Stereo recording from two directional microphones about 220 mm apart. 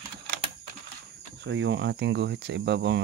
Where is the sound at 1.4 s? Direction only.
55° right (ahead or behind).